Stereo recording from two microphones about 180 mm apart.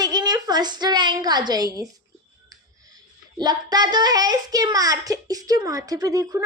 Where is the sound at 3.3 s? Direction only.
20° right (ahead or behind).